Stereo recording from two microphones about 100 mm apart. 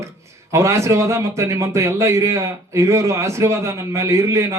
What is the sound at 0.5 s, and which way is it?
A man's voice, 30° right (ahead or behind).